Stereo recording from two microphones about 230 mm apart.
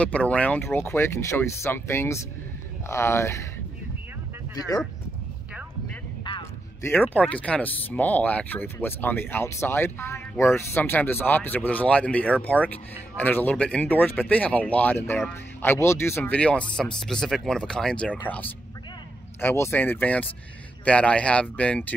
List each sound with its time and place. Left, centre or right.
0.0 s speech: centre
6.2 s a sound: left
6.9 s speech: centre